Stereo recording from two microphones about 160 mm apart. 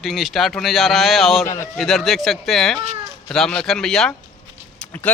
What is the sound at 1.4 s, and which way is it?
Speech, 20° left (ahead or behind).